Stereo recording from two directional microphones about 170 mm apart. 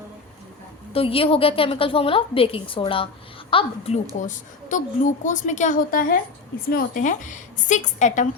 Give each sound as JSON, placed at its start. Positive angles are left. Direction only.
{"t": 0.9, "sound": "a woman's voice", "side_deg": 35}
{"t": 4.7, "sound": "a woman's voice", "side_deg": 50}